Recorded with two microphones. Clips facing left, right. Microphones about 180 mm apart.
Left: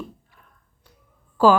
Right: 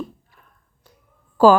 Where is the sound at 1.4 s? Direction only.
45° right (ahead or behind).